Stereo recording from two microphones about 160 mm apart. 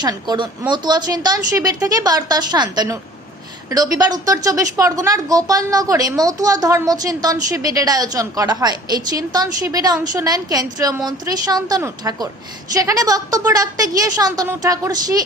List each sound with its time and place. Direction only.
0.0 s a woman's voice: 25° right (ahead or behind)